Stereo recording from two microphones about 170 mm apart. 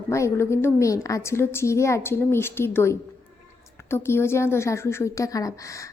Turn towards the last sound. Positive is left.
turn(degrees=20)  # may be behind; listen again after turning